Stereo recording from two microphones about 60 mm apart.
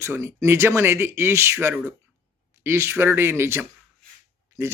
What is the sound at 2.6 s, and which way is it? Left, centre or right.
Speech, right.